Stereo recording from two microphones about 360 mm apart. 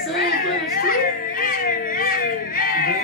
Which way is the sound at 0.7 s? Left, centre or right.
Left.